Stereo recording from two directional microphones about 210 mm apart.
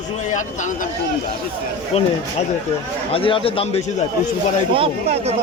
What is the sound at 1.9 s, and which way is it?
Speech, 30° left (ahead or behind).